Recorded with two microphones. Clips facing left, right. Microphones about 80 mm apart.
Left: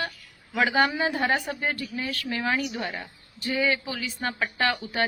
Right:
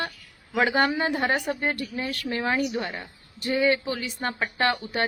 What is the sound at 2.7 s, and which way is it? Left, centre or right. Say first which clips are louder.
Speech: right 2 dB; centre.